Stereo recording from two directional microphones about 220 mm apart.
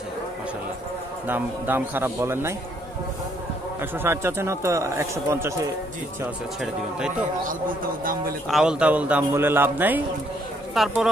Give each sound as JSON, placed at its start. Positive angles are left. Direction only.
{"t": 1.2, "sound": "a man's voice", "side_deg": -10}
{"t": 4.0, "sound": "a man's voice", "side_deg": -10}
{"t": 7.4, "sound": "a man's voice", "side_deg": -40}
{"t": 8.5, "sound": "a man's voice", "side_deg": -5}